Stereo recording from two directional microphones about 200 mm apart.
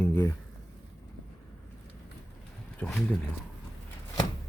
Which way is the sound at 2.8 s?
5° left (ahead or behind).